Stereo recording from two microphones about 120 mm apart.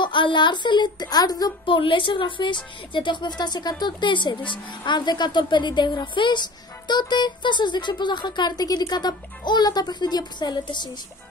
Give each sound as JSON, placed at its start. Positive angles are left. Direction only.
{"t": 0.0, "sound": "speech", "side_deg": 40}
{"t": 1.8, "sound": "speech", "side_deg": 45}